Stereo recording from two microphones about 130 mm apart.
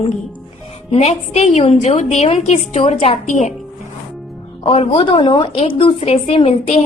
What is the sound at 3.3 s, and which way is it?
Speech, 65° left (ahead or behind).